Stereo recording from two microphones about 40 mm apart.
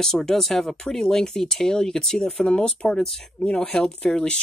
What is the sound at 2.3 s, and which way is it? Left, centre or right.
Speech, left.